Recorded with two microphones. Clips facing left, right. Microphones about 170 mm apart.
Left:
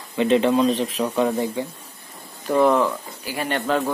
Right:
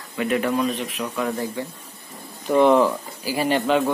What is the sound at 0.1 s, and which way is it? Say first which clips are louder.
Speech: left 4 dB; 25° left (ahead or behind).